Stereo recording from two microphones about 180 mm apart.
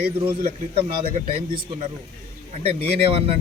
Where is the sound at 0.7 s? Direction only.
35° right (ahead or behind).